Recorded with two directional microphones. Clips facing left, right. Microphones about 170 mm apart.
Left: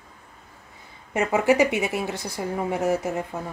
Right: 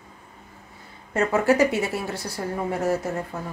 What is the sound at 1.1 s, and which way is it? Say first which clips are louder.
A woman's voice: even; 15° left (ahead or behind).